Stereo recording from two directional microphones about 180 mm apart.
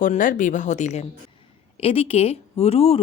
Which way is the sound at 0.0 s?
50° left (ahead or behind).